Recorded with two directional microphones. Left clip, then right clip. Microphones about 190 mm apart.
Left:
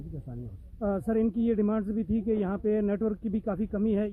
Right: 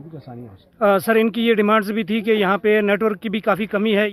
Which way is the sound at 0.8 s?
5° right (ahead or behind).